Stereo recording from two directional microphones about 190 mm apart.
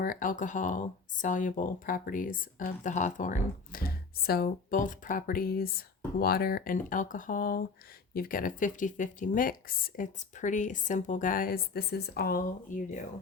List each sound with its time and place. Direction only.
0.0 s speech: 45° left (ahead or behind)